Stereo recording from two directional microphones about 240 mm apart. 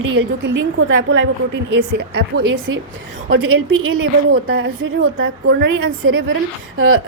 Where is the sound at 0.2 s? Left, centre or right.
Right.